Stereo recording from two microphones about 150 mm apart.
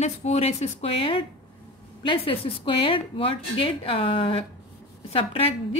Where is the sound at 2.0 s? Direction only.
35° left (ahead or behind).